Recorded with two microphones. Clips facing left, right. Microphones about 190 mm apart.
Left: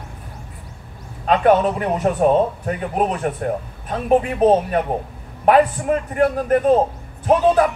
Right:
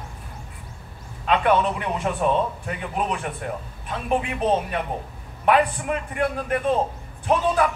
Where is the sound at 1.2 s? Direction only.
40° left (ahead or behind).